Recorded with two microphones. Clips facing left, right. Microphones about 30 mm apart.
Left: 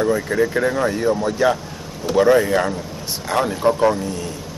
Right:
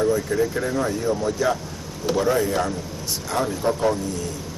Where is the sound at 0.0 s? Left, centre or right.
Left.